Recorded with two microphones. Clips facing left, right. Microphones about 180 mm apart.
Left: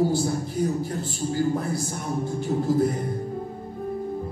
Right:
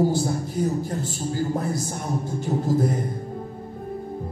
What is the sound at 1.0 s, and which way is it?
Speech, 45° right (ahead or behind).